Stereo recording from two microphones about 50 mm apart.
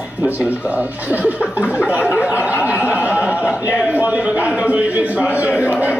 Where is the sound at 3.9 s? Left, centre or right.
Right.